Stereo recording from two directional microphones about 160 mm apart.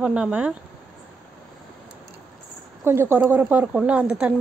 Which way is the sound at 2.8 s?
15° right (ahead or behind).